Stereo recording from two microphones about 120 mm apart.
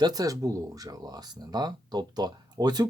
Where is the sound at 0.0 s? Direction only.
30° right (ahead or behind).